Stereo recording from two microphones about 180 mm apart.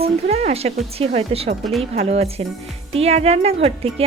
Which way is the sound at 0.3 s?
35° right (ahead or behind).